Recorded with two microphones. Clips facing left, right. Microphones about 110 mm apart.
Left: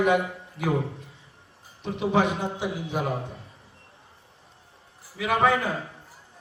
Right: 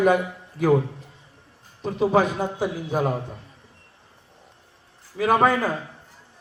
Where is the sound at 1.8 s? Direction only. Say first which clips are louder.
Right 4 dB; 40° right (ahead or behind).